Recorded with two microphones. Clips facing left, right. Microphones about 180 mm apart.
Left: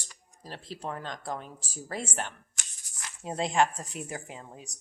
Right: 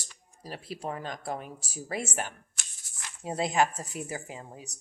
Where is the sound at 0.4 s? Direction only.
10° right (ahead or behind).